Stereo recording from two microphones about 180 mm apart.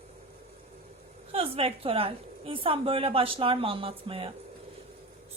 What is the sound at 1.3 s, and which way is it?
A woman's voice, 30° right (ahead or behind).